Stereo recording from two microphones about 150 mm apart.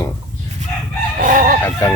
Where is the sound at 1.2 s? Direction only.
65° right (ahead or behind).